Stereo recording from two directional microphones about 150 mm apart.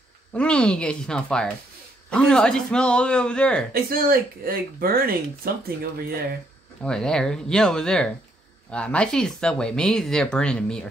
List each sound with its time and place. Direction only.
0.3 s speech: 5° left (ahead or behind)
3.7 s speech: 80° right
5.9 s speech: 90° right
6.8 s speech: 5° left (ahead or behind)